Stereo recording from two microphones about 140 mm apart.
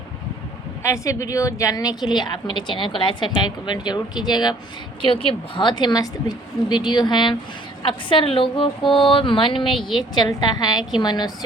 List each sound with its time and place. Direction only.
0.8 s a woman's voice: 20° left (ahead or behind)
5.0 s a woman's voice: 40° left (ahead or behind)